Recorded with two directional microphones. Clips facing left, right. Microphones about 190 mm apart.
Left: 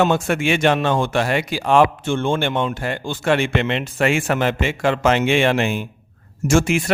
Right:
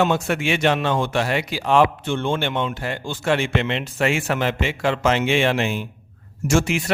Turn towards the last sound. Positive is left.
turn(degrees=50)  # may be behind; listen again after turning